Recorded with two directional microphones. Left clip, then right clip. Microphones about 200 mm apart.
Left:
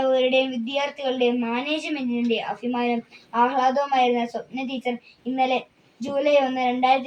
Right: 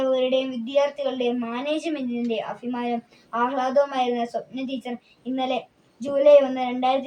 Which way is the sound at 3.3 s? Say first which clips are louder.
Left 2 dB; 15° right (ahead or behind).